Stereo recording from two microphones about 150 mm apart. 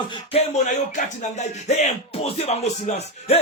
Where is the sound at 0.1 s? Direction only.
45° left (ahead or behind).